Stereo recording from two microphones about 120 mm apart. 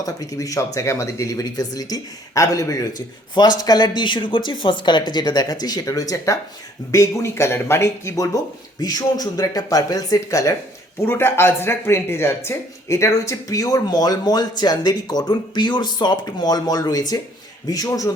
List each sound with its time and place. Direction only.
0.0 s speech: 30° left (ahead or behind)